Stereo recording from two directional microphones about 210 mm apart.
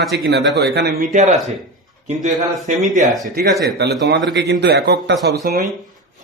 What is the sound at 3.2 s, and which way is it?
A man's voice, 45° right (ahead or behind).